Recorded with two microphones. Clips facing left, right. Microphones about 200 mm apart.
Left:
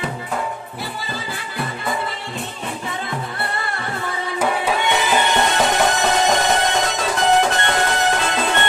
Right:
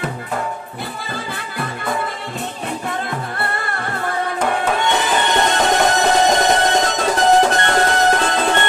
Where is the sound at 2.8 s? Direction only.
50° right (ahead or behind).